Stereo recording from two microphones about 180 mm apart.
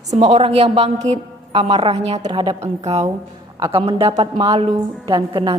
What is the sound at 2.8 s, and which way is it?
A woman's voice, 40° right (ahead or behind).